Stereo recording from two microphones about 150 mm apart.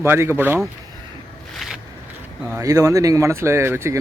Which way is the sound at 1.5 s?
Centre (ahead or behind).